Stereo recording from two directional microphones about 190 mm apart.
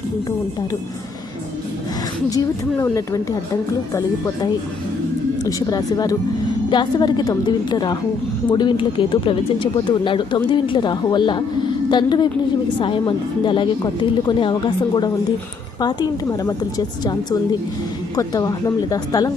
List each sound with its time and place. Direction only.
2.3 s speech: 15° left (ahead or behind)
5.4 s speech: 20° left (ahead or behind)
15.8 s speech: 20° left (ahead or behind)
18.2 s speech: 20° left (ahead or behind)